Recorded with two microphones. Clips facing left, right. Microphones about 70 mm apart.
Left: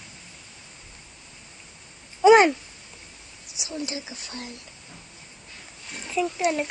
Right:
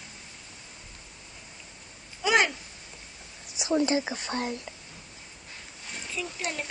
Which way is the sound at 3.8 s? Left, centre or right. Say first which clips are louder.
Right 7 dB; right.